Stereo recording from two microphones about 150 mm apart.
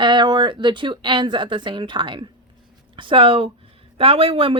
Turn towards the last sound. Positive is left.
turn(degrees=-40)  # may be behind; listen again after turning